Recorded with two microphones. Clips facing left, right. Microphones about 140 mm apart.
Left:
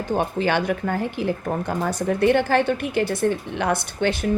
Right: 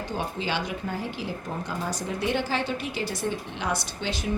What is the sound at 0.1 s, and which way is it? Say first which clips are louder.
Speech: left 10 dB; 55° left (ahead or behind).